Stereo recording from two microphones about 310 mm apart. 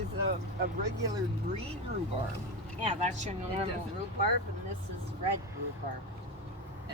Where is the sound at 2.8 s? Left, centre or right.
Right.